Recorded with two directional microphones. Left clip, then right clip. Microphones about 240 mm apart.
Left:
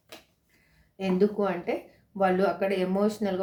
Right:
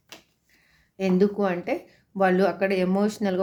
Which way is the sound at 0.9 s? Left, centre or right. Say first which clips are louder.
Right 3 dB; right.